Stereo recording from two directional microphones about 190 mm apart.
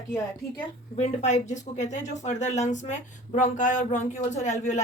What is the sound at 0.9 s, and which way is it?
A woman's voice, 35° left (ahead or behind).